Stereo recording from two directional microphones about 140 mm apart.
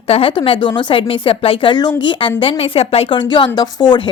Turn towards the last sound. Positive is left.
turn(degrees=35)  # may be behind; listen again after turning